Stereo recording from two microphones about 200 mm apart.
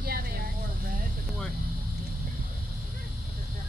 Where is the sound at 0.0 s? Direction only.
50° right (ahead or behind).